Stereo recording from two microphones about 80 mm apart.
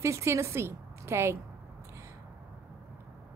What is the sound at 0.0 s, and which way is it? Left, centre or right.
A woman's voice, right.